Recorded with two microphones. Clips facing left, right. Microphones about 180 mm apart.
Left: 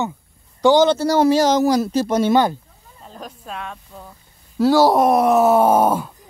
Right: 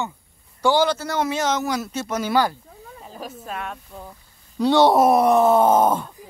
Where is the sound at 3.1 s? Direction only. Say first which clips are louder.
Even; 5° right (ahead or behind).